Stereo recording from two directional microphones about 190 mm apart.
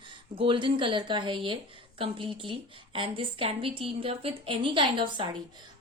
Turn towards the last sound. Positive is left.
turn(degrees=-25)  # may be behind; listen again after turning